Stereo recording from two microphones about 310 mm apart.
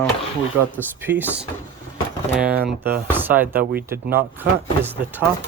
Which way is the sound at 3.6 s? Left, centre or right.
Right.